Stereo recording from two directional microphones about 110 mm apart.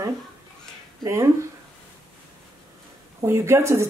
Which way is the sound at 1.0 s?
25° right (ahead or behind).